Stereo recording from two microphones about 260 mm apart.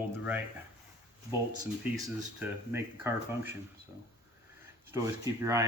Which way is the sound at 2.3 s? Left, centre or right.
Centre.